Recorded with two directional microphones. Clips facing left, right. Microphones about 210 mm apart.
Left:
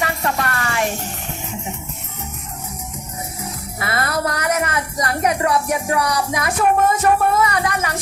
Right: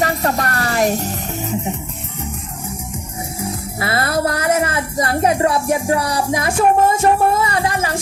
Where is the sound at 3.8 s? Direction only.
30° right (ahead or behind).